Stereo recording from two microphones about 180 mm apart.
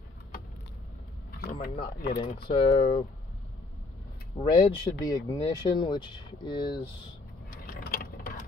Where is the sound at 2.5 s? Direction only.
30° left (ahead or behind).